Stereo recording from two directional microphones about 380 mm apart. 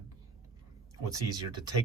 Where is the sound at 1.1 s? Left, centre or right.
Centre.